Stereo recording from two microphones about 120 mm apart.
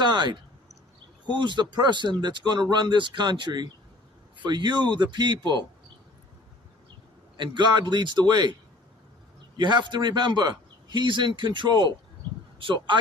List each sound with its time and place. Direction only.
0.0 s speech: 40° right (ahead or behind)
7.3 s speech: 40° right (ahead or behind)
9.6 s speech: 40° right (ahead or behind)